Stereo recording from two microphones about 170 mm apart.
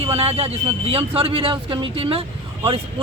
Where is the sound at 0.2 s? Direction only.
35° right (ahead or behind).